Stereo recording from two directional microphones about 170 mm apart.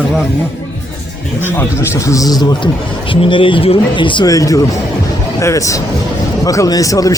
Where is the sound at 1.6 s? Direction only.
20° left (ahead or behind).